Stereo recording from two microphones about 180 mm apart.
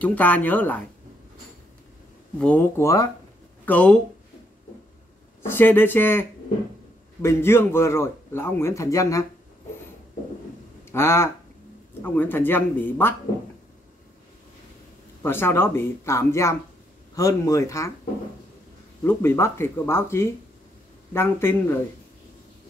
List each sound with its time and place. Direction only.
0.0 s a man's voice: 10° left (ahead or behind)
2.4 s a man's voice: 10° left (ahead or behind)
5.4 s a man's voice: 10° left (ahead or behind)
10.9 s a man's voice: 15° left (ahead or behind)
15.2 s a man's voice: 10° left (ahead or behind)
19.0 s a man's voice: 15° left (ahead or behind)